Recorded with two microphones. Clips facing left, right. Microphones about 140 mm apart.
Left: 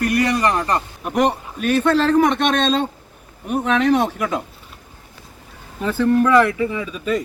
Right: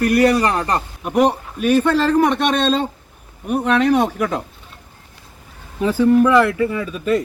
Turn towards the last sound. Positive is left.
turn(degrees=0)  # may be behind; listen again after turning